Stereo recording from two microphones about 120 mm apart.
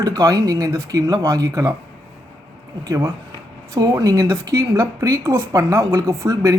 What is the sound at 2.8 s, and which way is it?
Speech, 30° right (ahead or behind).